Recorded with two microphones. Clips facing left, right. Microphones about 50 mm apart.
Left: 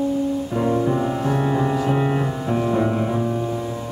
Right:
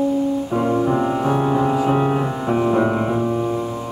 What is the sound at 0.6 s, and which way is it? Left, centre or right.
Music, centre.